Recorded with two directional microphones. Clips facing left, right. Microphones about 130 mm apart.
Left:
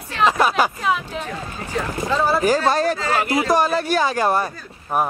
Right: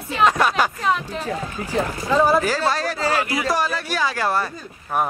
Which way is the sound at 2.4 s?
20° left (ahead or behind).